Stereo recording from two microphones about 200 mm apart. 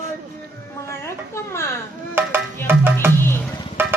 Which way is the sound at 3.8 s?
10° right (ahead or behind).